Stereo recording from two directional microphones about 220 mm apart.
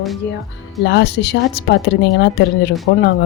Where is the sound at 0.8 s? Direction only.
50° left (ahead or behind).